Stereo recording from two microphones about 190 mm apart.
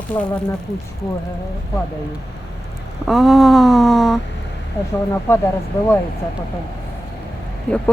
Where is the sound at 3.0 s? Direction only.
Centre (ahead or behind).